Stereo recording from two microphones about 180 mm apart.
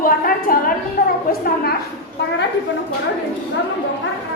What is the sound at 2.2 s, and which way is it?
Speech, 70° left (ahead or behind).